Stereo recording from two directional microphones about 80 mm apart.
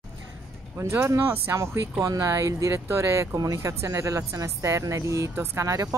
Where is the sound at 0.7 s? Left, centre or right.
Right.